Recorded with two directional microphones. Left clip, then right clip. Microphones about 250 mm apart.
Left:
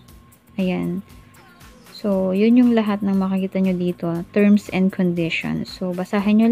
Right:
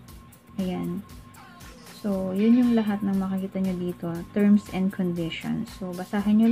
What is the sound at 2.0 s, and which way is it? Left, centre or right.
Speech, left.